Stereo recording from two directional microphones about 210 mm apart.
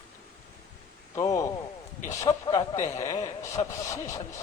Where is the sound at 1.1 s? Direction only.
15° left (ahead or behind).